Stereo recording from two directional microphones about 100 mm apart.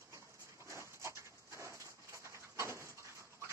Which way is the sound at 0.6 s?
30° right (ahead or behind).